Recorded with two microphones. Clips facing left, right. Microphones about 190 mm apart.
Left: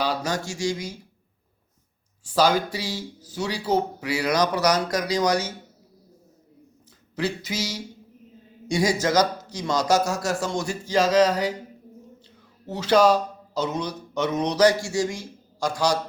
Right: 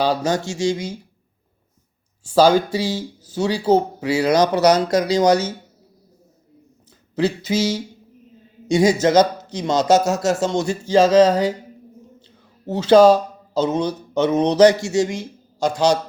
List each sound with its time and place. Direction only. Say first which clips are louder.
0.0 s speech: right 6 dB; 25° right (ahead or behind)
2.2 s speech: right 7 dB; 30° right (ahead or behind)
7.2 s speech: right 8 dB; 25° right (ahead or behind)
12.6 s speech: right 7 dB; 25° right (ahead or behind)